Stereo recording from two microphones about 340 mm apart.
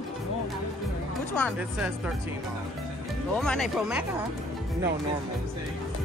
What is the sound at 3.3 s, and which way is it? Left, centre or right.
Speech, centre.